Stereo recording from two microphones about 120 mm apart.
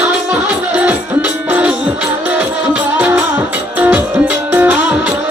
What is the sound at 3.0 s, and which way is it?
Music, 15° right (ahead or behind).